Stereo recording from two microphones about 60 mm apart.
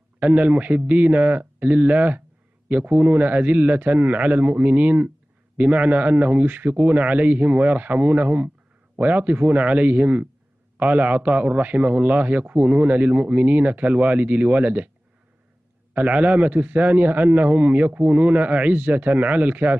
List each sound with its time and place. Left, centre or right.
0.2 s a man's voice: right
15.9 s a man's voice: right